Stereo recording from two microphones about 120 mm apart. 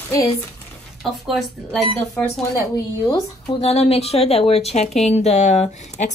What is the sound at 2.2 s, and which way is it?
Speech, 15° left (ahead or behind).